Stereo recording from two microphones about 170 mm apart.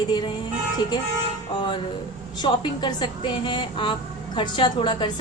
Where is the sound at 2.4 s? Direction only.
25° left (ahead or behind).